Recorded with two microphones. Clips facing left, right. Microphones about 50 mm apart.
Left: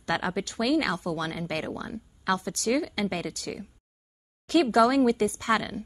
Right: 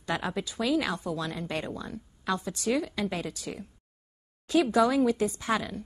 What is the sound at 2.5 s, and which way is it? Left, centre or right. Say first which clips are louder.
A woman's voice: left 2 dB; left.